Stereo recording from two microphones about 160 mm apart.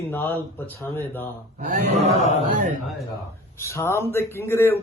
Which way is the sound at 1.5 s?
60° right (ahead or behind).